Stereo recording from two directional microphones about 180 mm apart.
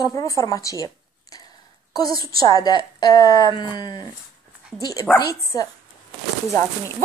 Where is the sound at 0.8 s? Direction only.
20° left (ahead or behind).